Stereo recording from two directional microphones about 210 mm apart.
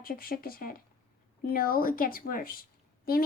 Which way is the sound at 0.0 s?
45° left (ahead or behind).